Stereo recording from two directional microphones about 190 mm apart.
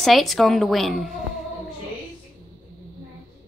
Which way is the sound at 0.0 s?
Centre (ahead or behind).